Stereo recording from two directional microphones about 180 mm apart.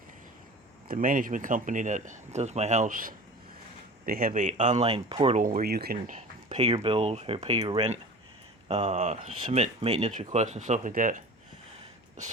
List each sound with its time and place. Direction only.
0.9 s speech: 50° right (ahead or behind); by 5.4 s 30° right (ahead or behind)
5.4 s speech: 50° right (ahead or behind)
6.1 s a sound: 35° right (ahead or behind)
6.8 s speech: 30° right (ahead or behind)
8.6 s speech: 35° right (ahead or behind)